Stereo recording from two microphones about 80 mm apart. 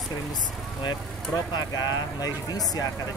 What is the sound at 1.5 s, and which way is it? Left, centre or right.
Speech, left.